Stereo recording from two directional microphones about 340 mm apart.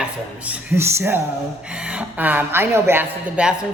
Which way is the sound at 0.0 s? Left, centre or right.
Centre.